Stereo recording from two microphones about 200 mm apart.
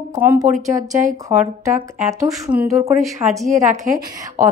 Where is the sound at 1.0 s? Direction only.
40° right (ahead or behind).